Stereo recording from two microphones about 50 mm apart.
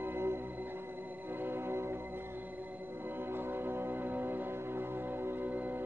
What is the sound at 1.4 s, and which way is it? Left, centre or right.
Music, right.